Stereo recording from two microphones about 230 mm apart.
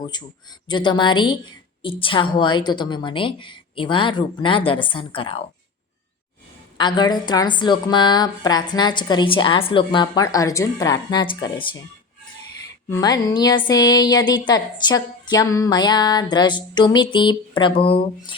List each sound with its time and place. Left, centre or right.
0.0 s a woman's voice: centre
6.7 s a woman's voice: centre
12.9 s a woman's voice: centre